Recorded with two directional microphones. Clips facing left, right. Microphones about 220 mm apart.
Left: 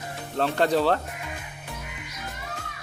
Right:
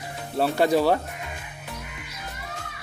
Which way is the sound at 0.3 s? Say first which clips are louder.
Right 2 dB; 10° right (ahead or behind).